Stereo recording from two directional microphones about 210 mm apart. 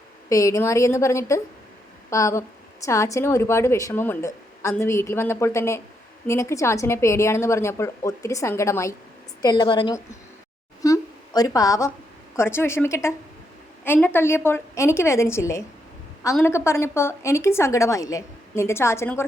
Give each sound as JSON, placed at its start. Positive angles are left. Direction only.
{"t": 0.3, "sound": "a woman's voice", "side_deg": 15}
{"t": 10.8, "sound": "a sound", "side_deg": 15}
{"t": 12.4, "sound": "a woman's voice", "side_deg": 10}